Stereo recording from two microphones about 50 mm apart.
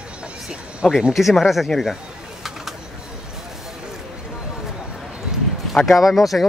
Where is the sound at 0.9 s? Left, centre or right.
Centre.